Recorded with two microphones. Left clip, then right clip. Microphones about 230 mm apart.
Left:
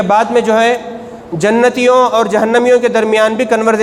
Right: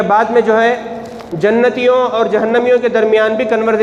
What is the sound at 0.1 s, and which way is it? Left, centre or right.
A man's voice, left.